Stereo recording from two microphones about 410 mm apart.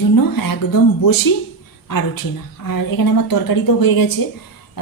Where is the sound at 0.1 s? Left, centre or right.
Left.